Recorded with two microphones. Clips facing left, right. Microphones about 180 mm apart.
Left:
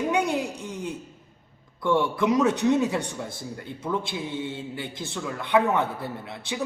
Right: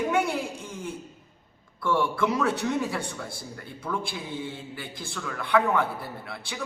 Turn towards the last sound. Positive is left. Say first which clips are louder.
# left 4 dB
turn(degrees=20)  # may be behind; listen again after turning